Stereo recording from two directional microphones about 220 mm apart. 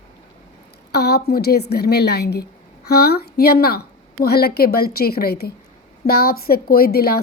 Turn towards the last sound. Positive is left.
turn(degrees=45)  # may be behind; listen again after turning